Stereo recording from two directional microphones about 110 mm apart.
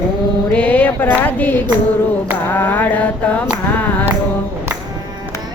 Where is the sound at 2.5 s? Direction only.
15° left (ahead or behind).